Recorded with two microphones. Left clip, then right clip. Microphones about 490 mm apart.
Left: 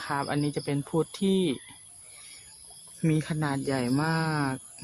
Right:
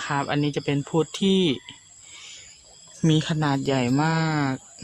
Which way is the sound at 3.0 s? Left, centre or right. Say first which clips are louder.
Right 6 dB; left.